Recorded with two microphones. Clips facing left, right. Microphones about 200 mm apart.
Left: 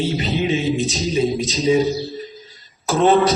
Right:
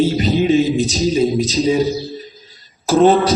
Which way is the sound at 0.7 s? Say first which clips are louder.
Right 4 dB; centre (ahead or behind).